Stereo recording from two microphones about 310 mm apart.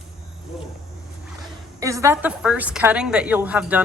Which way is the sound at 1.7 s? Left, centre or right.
Centre.